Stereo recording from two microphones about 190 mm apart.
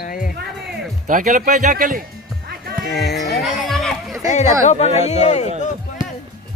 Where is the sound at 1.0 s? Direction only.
45° right (ahead or behind).